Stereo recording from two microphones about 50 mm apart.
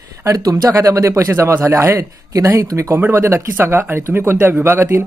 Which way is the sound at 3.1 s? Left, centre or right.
Right.